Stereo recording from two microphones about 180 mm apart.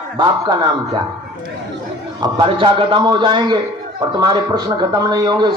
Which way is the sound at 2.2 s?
25° right (ahead or behind).